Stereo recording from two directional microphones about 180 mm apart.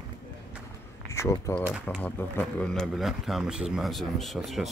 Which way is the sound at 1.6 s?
5° right (ahead or behind).